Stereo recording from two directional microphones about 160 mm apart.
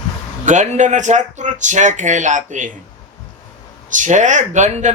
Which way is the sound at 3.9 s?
50° right (ahead or behind).